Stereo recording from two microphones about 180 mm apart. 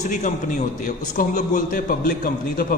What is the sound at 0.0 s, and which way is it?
A man's voice, 45° left (ahead or behind).